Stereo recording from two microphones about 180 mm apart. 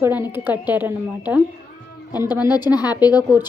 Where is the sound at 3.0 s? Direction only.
20° left (ahead or behind).